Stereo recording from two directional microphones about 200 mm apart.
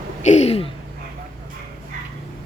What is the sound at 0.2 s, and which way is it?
Speech, 35° left (ahead or behind).